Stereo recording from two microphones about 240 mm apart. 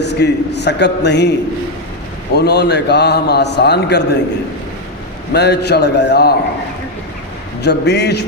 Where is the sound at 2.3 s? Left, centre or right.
Left.